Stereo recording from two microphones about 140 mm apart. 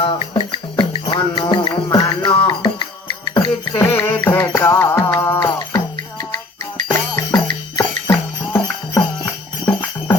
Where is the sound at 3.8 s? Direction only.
15° left (ahead or behind).